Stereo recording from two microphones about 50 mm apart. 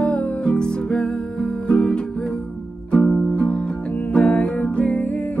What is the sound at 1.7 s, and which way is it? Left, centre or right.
Music, centre.